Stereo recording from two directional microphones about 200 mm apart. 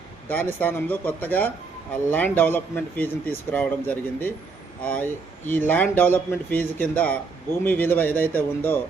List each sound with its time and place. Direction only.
0.3 s speech: 10° left (ahead or behind)